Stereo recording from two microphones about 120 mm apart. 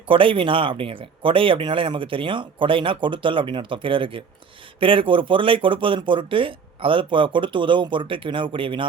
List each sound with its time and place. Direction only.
0.1 s speech: 45° right (ahead or behind)